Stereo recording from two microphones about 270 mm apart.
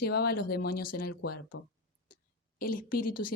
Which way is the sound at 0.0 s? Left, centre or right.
Left.